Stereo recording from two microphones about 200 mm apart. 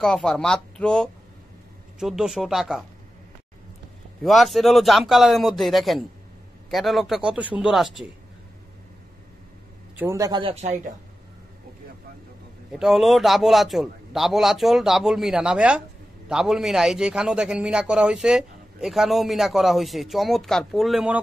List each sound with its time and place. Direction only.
0.0 s a man's voice: centre (ahead or behind)
4.2 s a man's voice: centre (ahead or behind)
9.9 s speech: 15° right (ahead or behind); by 10.8 s 35° right (ahead or behind)
12.7 s a man's voice: centre (ahead or behind)